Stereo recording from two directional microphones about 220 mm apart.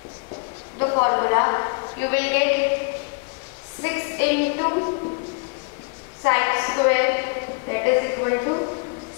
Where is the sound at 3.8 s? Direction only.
15° left (ahead or behind).